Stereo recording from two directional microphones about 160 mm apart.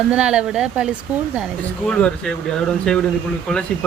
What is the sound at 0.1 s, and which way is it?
Speech, 5° right (ahead or behind).